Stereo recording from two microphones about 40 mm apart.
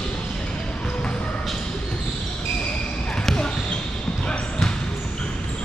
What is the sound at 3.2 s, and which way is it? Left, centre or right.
Basketball bounce, centre.